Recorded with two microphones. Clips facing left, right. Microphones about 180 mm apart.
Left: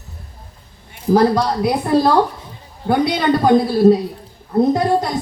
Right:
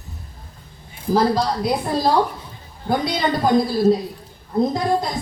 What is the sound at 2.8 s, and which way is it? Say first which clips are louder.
Speech: left 5 dB; 65° left (ahead or behind).